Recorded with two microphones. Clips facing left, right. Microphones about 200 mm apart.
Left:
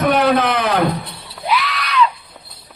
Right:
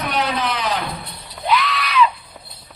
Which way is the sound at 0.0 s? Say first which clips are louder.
Left 8 dB; 55° left (ahead or behind).